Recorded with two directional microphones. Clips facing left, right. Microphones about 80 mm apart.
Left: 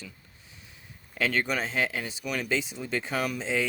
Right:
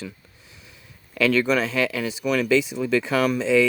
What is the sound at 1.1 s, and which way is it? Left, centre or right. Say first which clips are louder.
Speech: right 8 dB; right.